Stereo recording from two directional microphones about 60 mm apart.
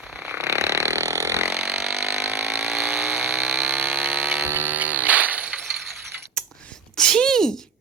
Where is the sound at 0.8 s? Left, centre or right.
Right.